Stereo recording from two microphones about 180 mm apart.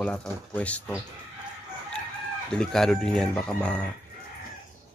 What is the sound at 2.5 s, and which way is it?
Speech, 5° left (ahead or behind).